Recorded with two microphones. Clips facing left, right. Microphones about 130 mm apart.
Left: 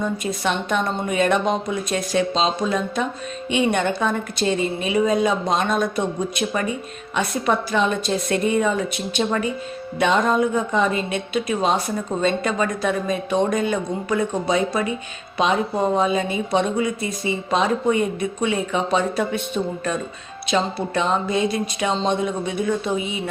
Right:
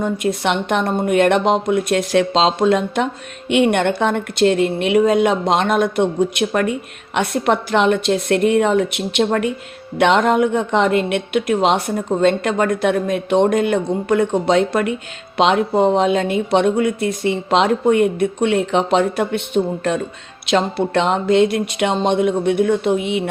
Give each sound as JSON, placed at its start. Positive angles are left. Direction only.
{"t": 0.0, "sound": "a woman's voice", "side_deg": -70}